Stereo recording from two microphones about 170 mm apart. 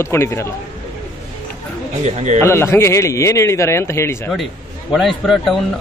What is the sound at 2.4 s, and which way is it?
A man's voice, 15° left (ahead or behind).